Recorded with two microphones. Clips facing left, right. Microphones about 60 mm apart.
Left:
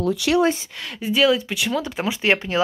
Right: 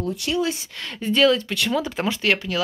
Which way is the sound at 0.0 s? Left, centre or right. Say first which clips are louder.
Left 5 dB; left.